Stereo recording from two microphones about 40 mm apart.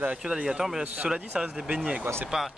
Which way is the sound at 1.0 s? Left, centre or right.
Centre.